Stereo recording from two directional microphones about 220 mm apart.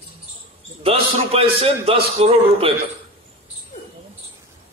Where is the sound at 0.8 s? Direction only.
25° right (ahead or behind).